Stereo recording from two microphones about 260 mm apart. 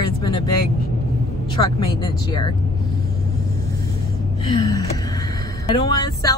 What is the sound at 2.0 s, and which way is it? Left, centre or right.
Speech, centre.